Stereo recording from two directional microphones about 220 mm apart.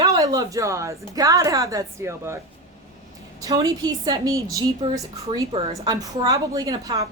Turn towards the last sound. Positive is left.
turn(degrees=-15)  # may be behind; listen again after turning